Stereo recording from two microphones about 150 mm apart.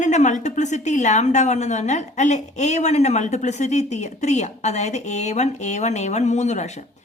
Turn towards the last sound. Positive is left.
turn(degrees=50)  # may be behind; listen again after turning